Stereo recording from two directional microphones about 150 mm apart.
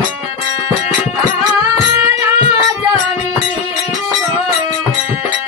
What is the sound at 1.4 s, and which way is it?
Music, 25° right (ahead or behind).